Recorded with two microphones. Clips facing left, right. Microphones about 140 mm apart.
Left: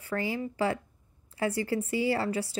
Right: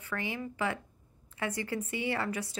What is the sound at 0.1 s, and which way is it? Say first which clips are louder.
A woman's voice: left 5 dB; 35° left (ahead or behind).